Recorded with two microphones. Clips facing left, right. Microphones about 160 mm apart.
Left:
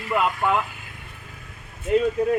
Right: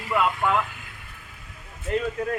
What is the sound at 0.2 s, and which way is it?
Speech, 10° left (ahead or behind).